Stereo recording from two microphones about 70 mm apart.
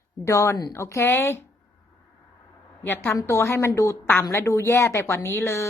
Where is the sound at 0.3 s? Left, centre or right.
Left.